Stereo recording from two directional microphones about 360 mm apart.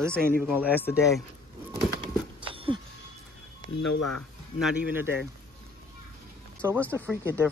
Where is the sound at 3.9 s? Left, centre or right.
Left.